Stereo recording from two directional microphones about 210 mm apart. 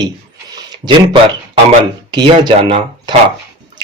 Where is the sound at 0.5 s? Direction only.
25° right (ahead or behind).